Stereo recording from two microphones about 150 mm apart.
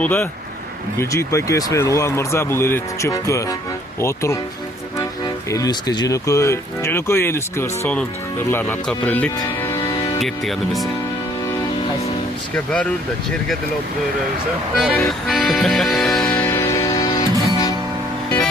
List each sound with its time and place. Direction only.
0.0 s speech: 15° left (ahead or behind)
5.5 s speech: 25° left (ahead or behind)
9.8 s music: 25° left (ahead or behind)
10.2 s speech: centre (ahead or behind)
12.5 s speech: 10° left (ahead or behind)
14.8 s music: centre (ahead or behind); by 17.7 s 25° left (ahead or behind)